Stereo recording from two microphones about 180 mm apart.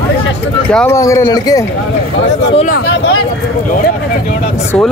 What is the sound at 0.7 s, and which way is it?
Speech, 5° left (ahead or behind).